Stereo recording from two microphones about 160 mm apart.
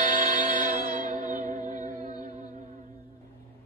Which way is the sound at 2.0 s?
50° right (ahead or behind).